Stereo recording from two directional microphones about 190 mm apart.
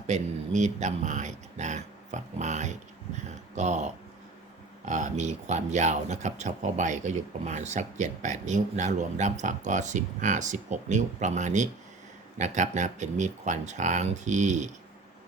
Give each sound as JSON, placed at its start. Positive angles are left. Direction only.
{"t": 0.1, "sound": "speech", "side_deg": -40}